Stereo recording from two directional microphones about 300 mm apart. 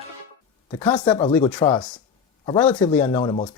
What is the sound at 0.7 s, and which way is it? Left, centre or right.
Speech, centre.